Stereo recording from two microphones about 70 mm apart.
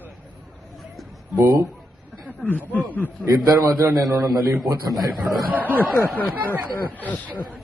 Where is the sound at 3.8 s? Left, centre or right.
Right.